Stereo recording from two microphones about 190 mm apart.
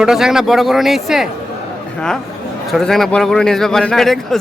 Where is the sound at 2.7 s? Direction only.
Centre (ahead or behind).